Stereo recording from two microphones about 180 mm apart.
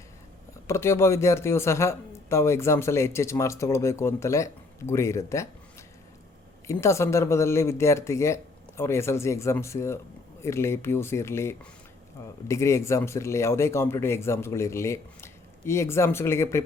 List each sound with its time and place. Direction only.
0.7 s speech: 15° left (ahead or behind)
6.7 s speech: 15° left (ahead or behind)